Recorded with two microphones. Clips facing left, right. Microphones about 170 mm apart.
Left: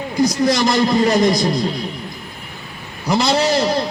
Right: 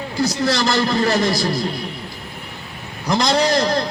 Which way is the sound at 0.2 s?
15° left (ahead or behind).